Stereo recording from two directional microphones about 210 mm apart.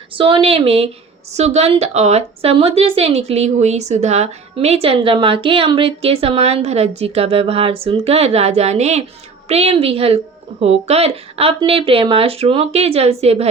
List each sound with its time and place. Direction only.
0.1 s a woman's voice: 25° right (ahead or behind)